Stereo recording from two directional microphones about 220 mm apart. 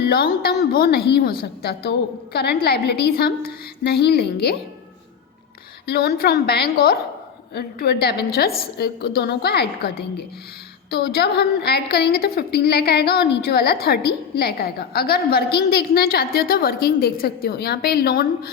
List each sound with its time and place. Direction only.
0.1 s a woman's voice: 45° left (ahead or behind)
5.8 s a woman's voice: 45° left (ahead or behind)